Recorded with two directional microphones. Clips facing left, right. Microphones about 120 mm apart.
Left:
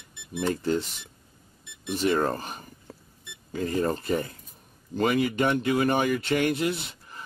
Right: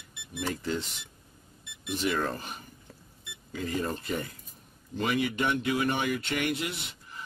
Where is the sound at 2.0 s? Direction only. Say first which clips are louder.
Left 6 dB; 40° left (ahead or behind).